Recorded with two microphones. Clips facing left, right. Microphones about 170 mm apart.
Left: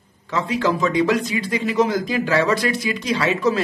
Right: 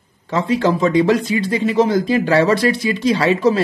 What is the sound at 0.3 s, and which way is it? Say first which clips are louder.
Speech: right 4 dB; 30° right (ahead or behind).